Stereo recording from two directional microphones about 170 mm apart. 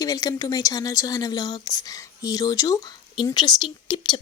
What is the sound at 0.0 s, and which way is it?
Speech, 20° left (ahead or behind).